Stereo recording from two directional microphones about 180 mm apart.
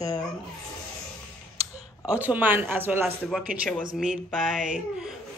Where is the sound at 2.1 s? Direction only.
10° right (ahead or behind).